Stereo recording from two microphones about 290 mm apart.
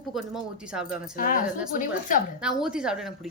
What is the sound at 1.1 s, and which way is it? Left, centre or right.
Speech, left.